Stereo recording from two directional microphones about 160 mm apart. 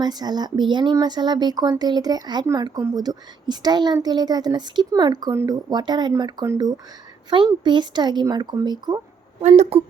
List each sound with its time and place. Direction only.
0.0 s speech: 25° right (ahead or behind)
9.4 s speech: 40° right (ahead or behind)